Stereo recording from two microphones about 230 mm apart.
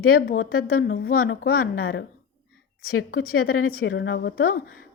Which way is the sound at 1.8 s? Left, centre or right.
Left.